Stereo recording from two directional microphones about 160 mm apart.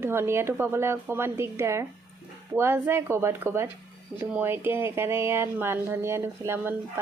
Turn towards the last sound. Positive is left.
turn(degrees=-15)  # may be behind; listen again after turning